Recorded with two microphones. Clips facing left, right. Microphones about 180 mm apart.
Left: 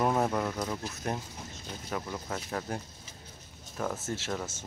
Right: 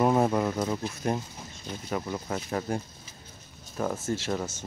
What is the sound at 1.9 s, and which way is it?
Speech, 10° right (ahead or behind).